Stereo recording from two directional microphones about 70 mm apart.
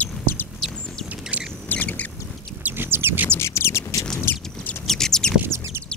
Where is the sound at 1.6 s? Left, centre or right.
Left.